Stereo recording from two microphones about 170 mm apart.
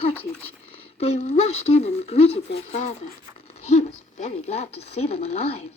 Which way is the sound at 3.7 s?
40° left (ahead or behind).